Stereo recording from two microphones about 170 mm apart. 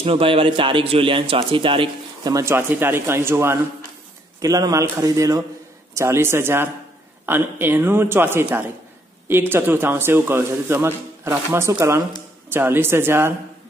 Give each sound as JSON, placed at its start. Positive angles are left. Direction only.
{"t": 0.0, "sound": "a man's voice", "side_deg": -30}